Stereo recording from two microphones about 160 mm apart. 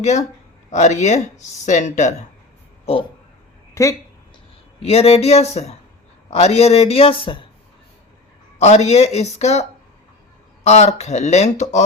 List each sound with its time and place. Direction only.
0.0 s speech: 45° left (ahead or behind)
4.8 s a man's voice: 40° left (ahead or behind)
8.5 s speech: 45° left (ahead or behind)